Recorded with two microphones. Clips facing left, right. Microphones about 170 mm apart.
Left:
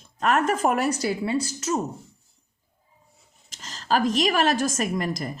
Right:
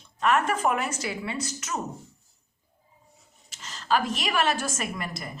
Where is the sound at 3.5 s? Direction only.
40° left (ahead or behind).